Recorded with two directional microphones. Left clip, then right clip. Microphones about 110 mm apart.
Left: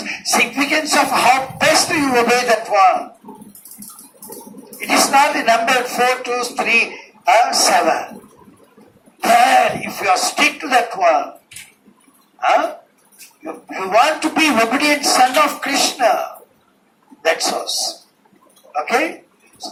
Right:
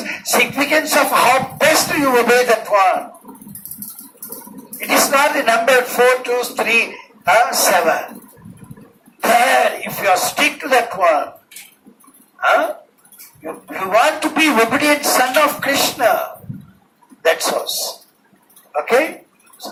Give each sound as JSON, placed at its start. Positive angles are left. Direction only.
{"t": 0.0, "sound": "speech", "side_deg": -35}
{"t": 4.9, "sound": "speech", "side_deg": -35}
{"t": 9.2, "sound": "speech", "side_deg": -35}
{"t": 12.4, "sound": "speech", "side_deg": -35}
{"t": 13.7, "sound": "speech", "side_deg": -35}
{"t": 18.7, "sound": "speech", "side_deg": -35}